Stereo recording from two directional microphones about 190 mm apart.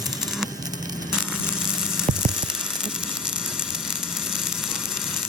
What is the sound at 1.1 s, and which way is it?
Hum, 5° right (ahead or behind).